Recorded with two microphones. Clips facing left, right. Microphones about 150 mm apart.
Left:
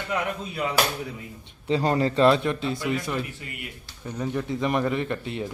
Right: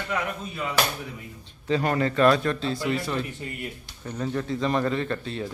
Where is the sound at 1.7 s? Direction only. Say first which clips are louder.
Left 1 dB; 25° left (ahead or behind).